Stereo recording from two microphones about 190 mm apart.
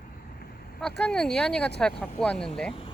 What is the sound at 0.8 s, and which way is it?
Speech, 5° left (ahead or behind).